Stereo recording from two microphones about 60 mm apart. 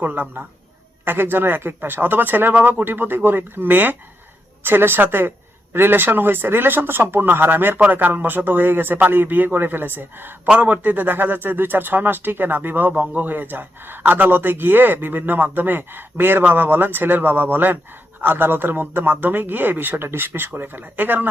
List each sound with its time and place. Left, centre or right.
0.0 s speech: right